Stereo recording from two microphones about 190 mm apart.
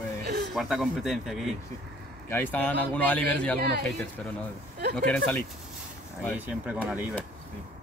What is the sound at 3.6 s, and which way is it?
Speech, 55° right (ahead or behind).